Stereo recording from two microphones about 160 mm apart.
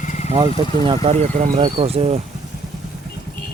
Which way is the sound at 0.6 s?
35° right (ahead or behind).